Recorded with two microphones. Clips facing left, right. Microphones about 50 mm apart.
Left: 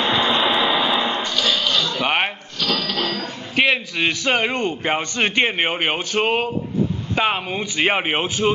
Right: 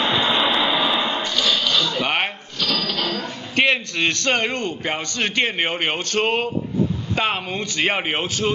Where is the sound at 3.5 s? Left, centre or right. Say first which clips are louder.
Even; centre.